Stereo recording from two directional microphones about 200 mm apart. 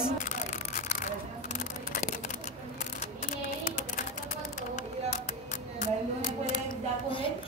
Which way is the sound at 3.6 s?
40° left (ahead or behind).